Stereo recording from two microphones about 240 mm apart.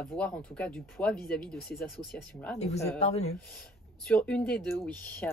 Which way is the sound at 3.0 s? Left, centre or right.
Left.